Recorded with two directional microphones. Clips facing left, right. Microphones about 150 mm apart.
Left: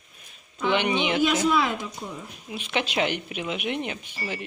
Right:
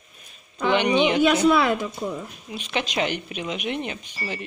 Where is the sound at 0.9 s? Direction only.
55° right (ahead or behind).